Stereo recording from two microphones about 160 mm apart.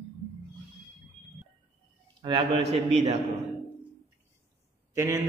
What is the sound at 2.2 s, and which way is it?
Speech, 30° right (ahead or behind).